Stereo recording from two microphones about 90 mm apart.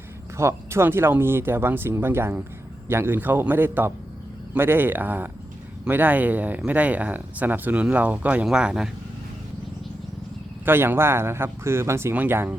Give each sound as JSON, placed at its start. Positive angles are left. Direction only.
{"t": 0.3, "sound": "speech", "side_deg": -30}
{"t": 10.7, "sound": "speech", "side_deg": -25}